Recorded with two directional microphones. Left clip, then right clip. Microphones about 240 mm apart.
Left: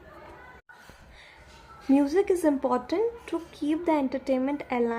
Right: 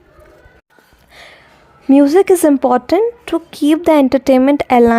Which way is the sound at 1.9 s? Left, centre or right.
Right.